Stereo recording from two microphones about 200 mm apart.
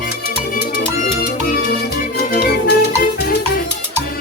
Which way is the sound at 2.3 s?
50° left (ahead or behind).